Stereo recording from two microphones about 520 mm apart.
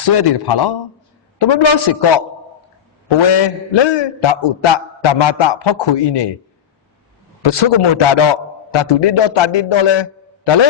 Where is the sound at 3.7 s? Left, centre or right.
Left.